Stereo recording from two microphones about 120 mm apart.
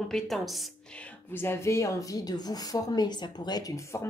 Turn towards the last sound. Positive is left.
turn(degrees=25)  # may be behind; listen again after turning